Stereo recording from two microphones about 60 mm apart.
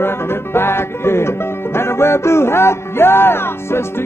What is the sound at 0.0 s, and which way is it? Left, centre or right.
Music, left.